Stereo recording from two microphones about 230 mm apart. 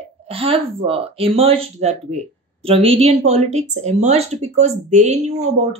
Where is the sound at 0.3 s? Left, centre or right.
Right.